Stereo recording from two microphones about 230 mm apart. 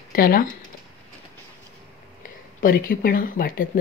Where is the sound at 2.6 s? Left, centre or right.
Left.